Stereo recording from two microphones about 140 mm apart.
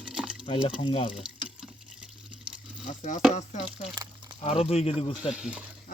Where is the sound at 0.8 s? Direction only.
40° left (ahead or behind).